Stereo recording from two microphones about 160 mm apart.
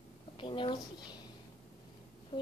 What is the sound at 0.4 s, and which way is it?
Speech, 30° left (ahead or behind).